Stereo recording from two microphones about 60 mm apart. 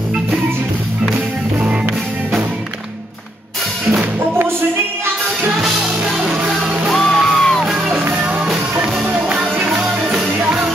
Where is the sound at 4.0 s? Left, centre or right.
Right.